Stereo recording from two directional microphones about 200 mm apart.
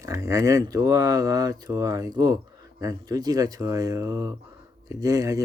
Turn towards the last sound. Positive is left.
turn(degrees=-15)  # may be behind; listen again after turning